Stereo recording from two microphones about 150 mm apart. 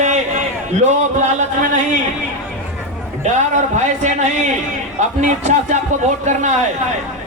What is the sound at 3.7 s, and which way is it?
A man's voice, 55° right (ahead or behind).